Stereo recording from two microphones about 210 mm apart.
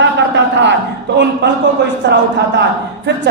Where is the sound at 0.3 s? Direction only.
55° right (ahead or behind).